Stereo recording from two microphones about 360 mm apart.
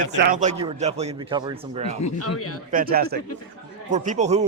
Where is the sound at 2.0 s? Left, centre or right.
Left.